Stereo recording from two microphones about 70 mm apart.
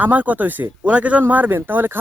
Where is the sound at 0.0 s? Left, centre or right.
Right.